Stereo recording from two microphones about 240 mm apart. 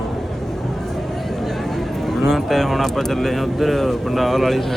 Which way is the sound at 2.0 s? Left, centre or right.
Centre.